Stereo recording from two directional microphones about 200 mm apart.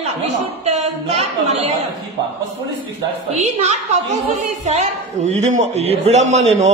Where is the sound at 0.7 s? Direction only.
35° right (ahead or behind).